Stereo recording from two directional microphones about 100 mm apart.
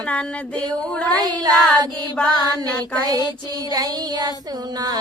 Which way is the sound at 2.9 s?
40° right (ahead or behind).